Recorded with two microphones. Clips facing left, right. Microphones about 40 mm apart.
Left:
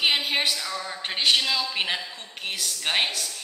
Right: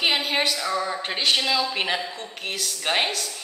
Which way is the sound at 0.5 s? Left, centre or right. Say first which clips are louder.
Right 6 dB; centre.